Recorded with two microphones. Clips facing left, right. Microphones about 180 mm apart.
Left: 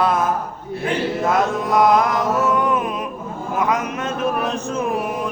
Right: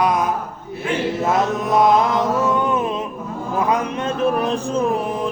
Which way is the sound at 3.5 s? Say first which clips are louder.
Right 1 dB; 30° right (ahead or behind).